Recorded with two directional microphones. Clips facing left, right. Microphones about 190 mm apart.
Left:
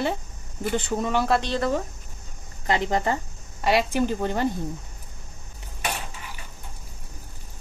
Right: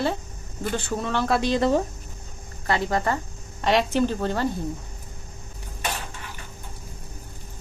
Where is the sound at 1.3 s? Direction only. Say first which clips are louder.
Right 1 dB; 10° right (ahead or behind).